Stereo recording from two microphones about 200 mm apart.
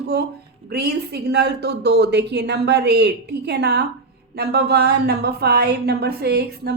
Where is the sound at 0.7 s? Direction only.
55° right (ahead or behind).